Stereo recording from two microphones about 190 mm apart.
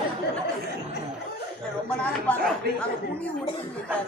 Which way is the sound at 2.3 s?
10° left (ahead or behind).